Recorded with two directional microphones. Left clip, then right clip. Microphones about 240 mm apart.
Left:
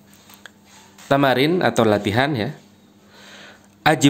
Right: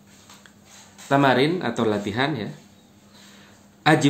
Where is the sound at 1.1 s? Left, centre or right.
Left.